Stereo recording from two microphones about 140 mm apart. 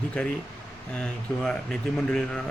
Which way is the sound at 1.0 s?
5° left (ahead or behind).